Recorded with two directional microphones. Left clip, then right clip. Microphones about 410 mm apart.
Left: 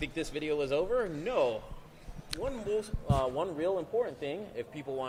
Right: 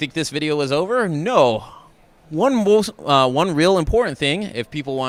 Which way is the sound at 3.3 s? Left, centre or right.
Right.